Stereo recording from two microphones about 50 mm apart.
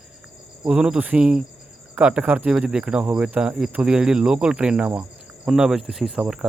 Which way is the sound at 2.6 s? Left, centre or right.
Right.